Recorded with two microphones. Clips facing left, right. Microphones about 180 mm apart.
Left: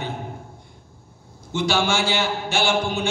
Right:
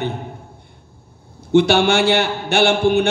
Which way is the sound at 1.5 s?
65° right (ahead or behind).